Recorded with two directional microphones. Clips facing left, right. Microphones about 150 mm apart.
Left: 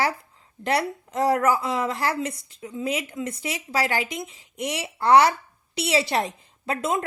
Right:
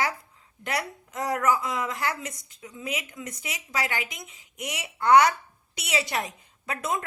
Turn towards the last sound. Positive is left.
turn(degrees=30)  # may be behind; listen again after turning